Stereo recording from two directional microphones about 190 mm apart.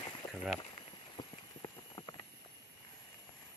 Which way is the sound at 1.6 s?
20° left (ahead or behind).